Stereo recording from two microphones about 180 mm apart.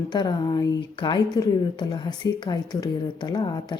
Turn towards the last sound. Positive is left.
turn(degrees=25)  # may be behind; listen again after turning